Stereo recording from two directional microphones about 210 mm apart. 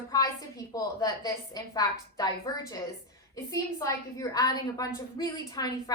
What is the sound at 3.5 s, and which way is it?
A woman's voice, 15° left (ahead or behind).